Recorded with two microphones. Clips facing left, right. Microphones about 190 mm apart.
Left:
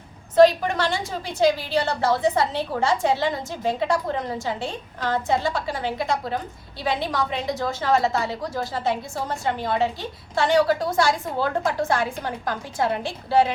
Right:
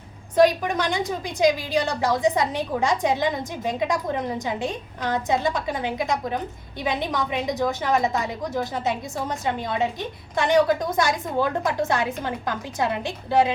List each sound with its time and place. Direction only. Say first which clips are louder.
0.3 s a woman's voice: left 3 dB; 15° right (ahead or behind)